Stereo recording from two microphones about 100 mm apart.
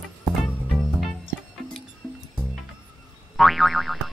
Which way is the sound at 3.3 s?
Centre (ahead or behind).